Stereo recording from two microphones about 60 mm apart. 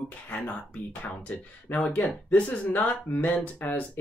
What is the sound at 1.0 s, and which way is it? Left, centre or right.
Speech, left.